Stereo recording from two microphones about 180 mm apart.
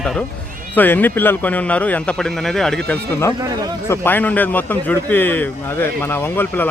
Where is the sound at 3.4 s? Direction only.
20° right (ahead or behind).